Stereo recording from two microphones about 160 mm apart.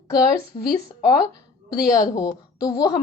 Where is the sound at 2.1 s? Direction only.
25° left (ahead or behind).